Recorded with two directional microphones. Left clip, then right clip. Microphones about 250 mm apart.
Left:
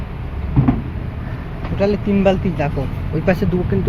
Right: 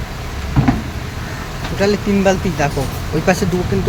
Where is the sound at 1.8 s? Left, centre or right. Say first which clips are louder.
Right 1 dB; centre.